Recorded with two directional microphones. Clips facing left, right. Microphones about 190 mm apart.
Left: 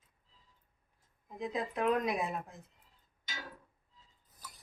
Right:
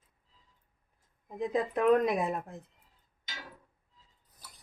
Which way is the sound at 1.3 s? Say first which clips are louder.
Right 6 dB; 50° right (ahead or behind).